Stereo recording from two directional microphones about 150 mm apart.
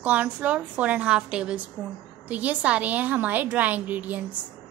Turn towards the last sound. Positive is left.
turn(degrees=-10)  # may be behind; listen again after turning